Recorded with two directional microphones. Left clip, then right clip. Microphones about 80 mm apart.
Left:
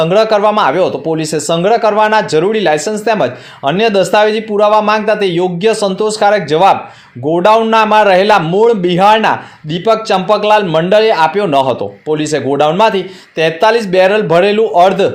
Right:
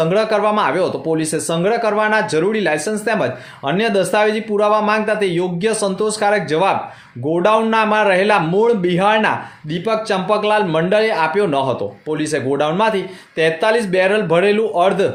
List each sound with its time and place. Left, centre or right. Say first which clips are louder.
0.0 s speech: left 6 dB; left